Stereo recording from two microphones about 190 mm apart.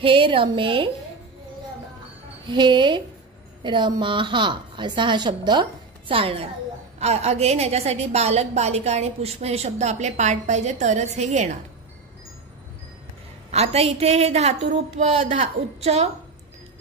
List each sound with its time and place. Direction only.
0.0 s a woman's voice: 25° right (ahead or behind)
2.4 s a woman's voice: 25° right (ahead or behind)
13.5 s a woman's voice: 35° right (ahead or behind)